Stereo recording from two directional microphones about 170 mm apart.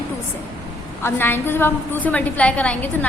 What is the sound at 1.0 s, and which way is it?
A woman's voice, 15° left (ahead or behind).